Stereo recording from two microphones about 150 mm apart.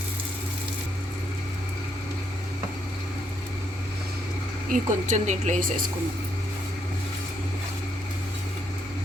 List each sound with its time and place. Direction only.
4.7 s speech: 50° right (ahead or behind)